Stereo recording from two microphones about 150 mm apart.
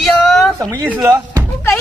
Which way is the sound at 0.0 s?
5° left (ahead or behind).